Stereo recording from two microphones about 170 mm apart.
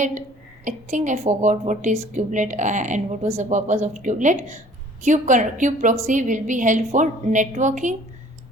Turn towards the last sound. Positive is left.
turn(degrees=-45)  # may be behind; listen again after turning